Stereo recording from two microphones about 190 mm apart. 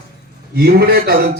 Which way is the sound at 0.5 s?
55° right (ahead or behind).